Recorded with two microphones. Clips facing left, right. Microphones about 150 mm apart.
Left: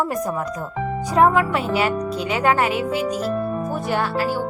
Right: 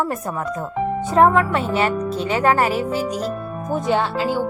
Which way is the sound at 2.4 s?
Centre (ahead or behind).